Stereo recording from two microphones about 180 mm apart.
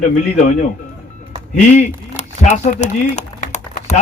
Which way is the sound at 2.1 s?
40° left (ahead or behind).